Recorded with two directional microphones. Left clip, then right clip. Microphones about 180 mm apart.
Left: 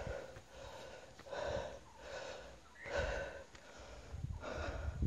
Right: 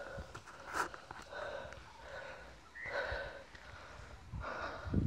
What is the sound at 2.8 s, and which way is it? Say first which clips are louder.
Snort: even; 40° left (ahead or behind).